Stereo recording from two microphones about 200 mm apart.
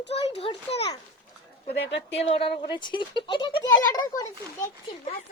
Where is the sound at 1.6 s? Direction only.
55° left (ahead or behind).